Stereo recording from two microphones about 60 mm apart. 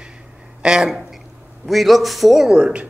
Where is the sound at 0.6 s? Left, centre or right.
Centre.